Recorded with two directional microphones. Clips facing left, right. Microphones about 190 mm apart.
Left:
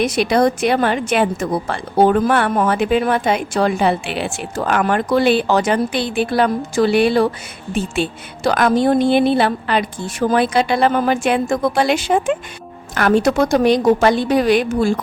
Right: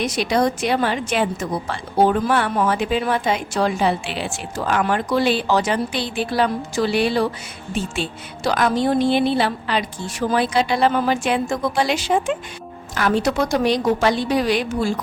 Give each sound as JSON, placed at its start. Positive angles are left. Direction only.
{"t": 0.0, "sound": "a woman's voice", "side_deg": 55}
{"t": 8.4, "sound": "a woman's voice", "side_deg": 55}